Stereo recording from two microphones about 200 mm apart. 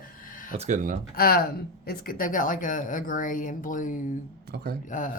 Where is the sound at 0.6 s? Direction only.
40° right (ahead or behind).